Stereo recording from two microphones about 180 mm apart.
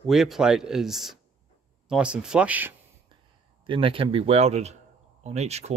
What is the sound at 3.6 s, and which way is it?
Speech, 30° right (ahead or behind).